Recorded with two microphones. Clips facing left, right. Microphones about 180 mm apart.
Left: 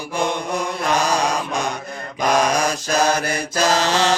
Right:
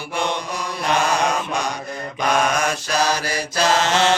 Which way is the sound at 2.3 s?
35° left (ahead or behind).